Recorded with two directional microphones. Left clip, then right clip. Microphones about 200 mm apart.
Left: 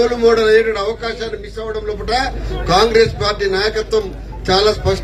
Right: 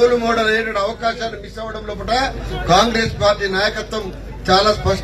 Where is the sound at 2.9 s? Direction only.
25° right (ahead or behind).